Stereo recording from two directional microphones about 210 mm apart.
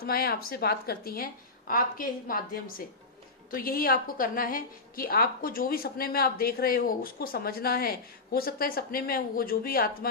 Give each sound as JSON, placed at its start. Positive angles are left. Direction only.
{"t": 0.0, "sound": "a woman's voice", "side_deg": 45}